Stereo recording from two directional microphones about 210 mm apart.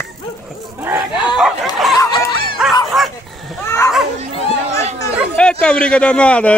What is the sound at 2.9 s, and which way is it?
Dog, centre (ahead or behind).